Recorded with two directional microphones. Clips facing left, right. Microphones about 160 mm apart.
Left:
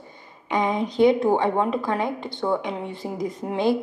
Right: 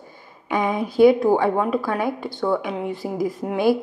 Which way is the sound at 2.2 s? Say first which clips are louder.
Right 2 dB; 25° left (ahead or behind).